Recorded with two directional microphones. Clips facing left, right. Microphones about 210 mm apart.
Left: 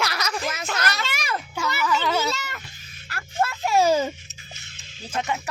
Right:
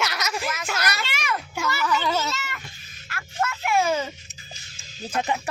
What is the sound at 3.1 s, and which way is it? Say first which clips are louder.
A child's voice: left 2 dB; 35° left (ahead or behind).